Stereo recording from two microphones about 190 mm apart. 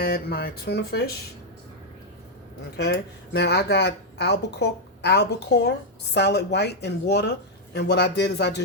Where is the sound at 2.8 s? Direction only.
60° left (ahead or behind).